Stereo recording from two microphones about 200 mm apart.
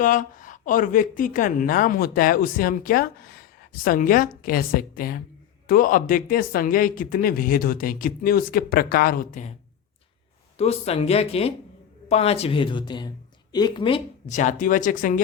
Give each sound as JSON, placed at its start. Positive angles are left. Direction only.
{"t": 0.0, "sound": "a woman's voice", "side_deg": 40}
{"t": 10.6, "sound": "speech", "side_deg": 30}
{"t": 14.3, "sound": "speech", "side_deg": 40}